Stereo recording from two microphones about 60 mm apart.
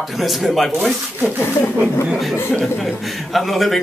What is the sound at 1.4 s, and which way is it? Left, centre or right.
Speech, left.